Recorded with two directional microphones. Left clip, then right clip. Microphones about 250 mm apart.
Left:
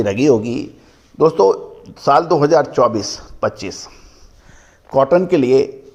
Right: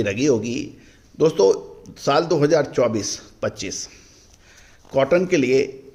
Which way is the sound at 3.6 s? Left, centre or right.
Centre.